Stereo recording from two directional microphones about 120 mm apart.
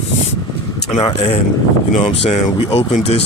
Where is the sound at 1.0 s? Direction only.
50° left (ahead or behind).